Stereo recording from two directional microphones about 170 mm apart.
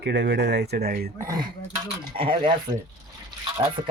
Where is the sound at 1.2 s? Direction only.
20° right (ahead or behind).